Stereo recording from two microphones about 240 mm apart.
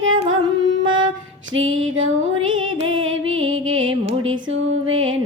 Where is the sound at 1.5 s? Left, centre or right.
Right.